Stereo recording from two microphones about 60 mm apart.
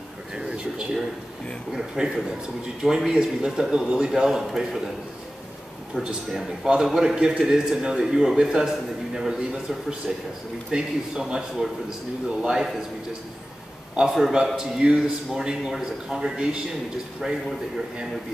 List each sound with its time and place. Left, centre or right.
0.4 s a sound: centre
1.7 s a man's voice: centre
6.0 s a man's voice: centre
13.9 s a man's voice: centre